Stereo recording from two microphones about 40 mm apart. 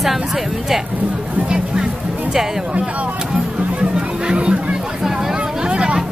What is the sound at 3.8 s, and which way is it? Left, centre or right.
Chatter, right.